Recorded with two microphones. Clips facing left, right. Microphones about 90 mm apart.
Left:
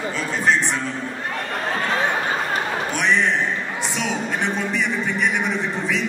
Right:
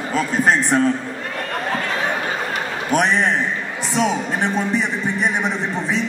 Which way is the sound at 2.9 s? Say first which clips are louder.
Right 4 dB; 45° right (ahead or behind).